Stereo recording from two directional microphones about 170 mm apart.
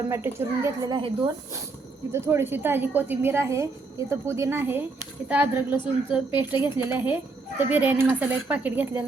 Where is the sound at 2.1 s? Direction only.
15° right (ahead or behind).